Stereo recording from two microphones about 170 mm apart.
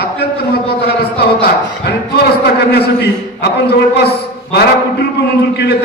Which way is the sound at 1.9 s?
70° left (ahead or behind).